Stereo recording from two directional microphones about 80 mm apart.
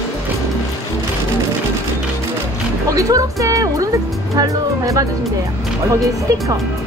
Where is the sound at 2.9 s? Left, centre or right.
Right.